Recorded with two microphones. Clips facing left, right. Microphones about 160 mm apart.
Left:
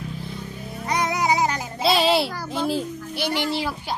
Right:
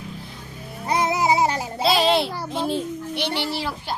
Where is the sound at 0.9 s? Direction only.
30° right (ahead or behind).